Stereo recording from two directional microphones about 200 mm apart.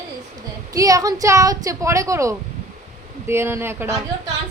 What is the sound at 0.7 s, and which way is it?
A woman's voice, 15° right (ahead or behind).